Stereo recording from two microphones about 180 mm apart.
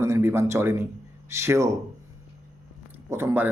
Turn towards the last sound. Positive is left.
turn(degrees=-10)  # may be behind; listen again after turning